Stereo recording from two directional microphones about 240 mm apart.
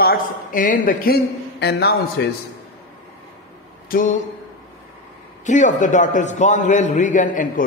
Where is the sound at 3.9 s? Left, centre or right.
Left.